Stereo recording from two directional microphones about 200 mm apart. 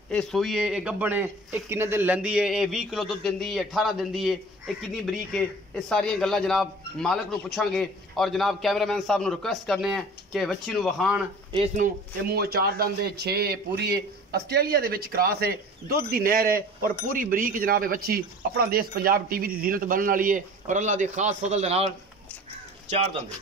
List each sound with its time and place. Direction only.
0.1 s a man's voice: 5° left (ahead or behind)
11.5 s speech: 35° right (ahead or behind)